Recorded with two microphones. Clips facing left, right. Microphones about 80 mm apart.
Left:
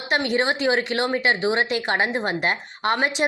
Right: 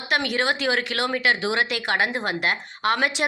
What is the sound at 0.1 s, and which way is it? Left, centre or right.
A woman's voice, left.